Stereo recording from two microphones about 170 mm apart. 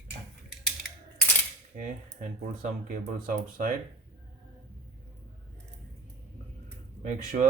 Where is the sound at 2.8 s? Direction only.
55° right (ahead or behind).